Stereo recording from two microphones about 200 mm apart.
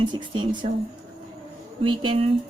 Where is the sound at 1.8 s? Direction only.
25° right (ahead or behind).